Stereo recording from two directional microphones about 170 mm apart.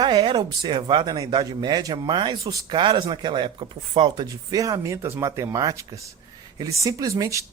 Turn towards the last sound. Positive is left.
turn(degrees=-20)  # may be behind; listen again after turning